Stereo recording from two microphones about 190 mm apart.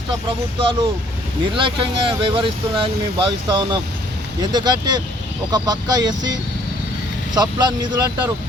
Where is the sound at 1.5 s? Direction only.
25° right (ahead or behind).